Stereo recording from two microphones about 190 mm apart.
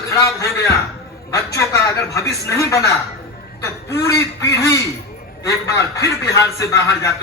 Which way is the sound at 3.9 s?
15° left (ahead or behind).